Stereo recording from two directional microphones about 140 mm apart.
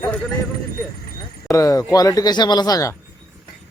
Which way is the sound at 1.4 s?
25° left (ahead or behind).